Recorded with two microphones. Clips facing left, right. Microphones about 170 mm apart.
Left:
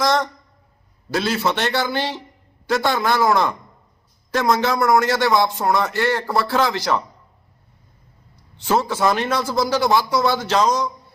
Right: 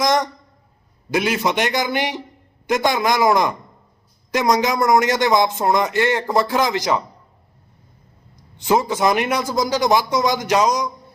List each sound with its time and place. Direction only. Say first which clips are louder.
0.0 s a man's voice: right 1 dB; 15° right (ahead or behind)
8.5 s a man's voice: right 2 dB; 15° right (ahead or behind)